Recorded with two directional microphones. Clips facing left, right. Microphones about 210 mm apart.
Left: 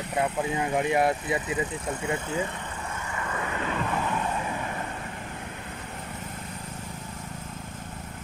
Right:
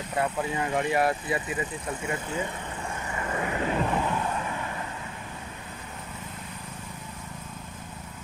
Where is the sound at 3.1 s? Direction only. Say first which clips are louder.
Right 3 dB; 25° right (ahead or behind).